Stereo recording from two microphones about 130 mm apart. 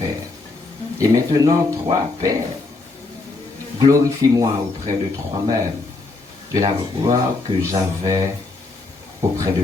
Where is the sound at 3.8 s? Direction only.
30° right (ahead or behind).